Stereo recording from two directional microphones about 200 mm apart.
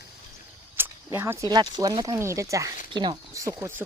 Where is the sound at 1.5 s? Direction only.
20° right (ahead or behind).